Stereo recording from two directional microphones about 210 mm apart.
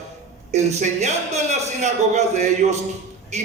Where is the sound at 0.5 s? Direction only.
35° right (ahead or behind).